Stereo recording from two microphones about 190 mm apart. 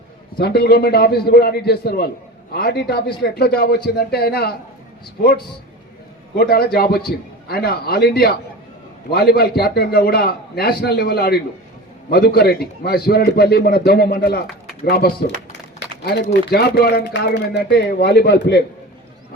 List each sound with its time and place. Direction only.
0.3 s speech: 55° left (ahead or behind)
6.3 s a man's voice: 55° left (ahead or behind)
16.3 s speech: 55° left (ahead or behind)